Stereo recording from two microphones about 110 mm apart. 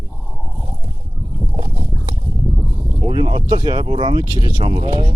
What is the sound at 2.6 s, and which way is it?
Speech, 40° right (ahead or behind).